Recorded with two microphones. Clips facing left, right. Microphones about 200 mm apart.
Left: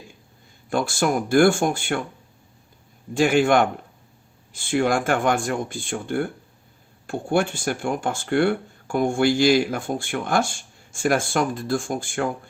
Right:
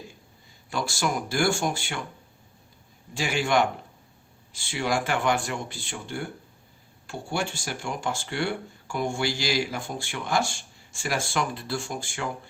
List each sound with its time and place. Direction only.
0.7 s speech: 50° left (ahead or behind)
3.2 s speech: 50° left (ahead or behind)